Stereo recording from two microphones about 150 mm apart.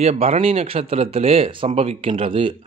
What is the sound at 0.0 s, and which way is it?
A man's voice, 45° right (ahead or behind).